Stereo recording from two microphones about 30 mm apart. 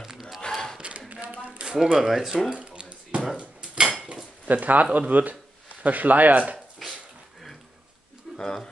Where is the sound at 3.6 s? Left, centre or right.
Right.